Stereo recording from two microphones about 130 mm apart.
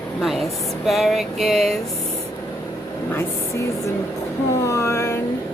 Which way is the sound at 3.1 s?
20° left (ahead or behind).